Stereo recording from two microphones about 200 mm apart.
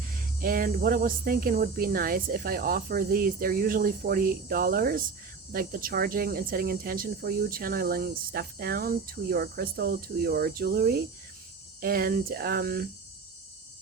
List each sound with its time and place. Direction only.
0.4 s speech: 45° right (ahead or behind)